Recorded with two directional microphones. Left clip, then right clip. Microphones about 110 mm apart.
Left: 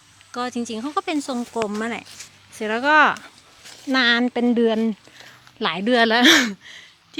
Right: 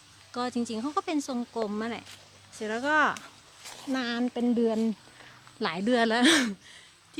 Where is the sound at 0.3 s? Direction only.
25° left (ahead or behind).